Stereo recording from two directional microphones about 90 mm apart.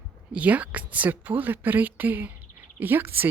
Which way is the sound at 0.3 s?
15° right (ahead or behind).